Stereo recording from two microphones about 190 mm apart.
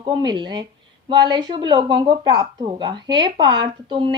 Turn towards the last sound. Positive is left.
turn(degrees=-25)  # may be behind; listen again after turning